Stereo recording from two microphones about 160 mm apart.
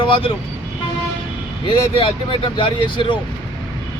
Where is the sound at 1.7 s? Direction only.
30° left (ahead or behind).